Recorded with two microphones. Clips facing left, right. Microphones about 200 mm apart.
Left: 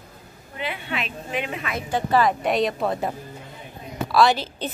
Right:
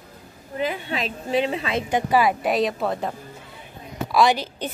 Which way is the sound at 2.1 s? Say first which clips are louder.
Even; 10° right (ahead or behind).